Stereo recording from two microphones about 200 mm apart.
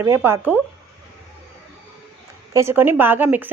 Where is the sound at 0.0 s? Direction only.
10° right (ahead or behind).